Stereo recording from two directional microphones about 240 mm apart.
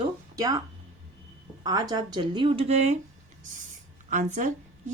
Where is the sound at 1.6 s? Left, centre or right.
Centre.